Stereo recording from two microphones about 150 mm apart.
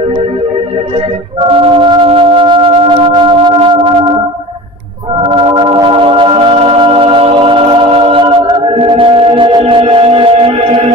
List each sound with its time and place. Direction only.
1.4 s music: 35° right (ahead or behind)
5.2 s music: 35° right (ahead or behind)